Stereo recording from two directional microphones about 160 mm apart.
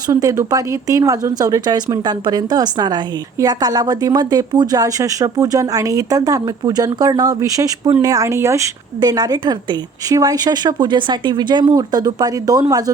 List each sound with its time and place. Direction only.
0.1 s speech: 20° right (ahead or behind)